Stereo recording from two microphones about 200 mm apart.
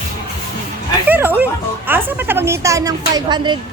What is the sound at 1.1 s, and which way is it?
A woman's voice, 10° right (ahead or behind).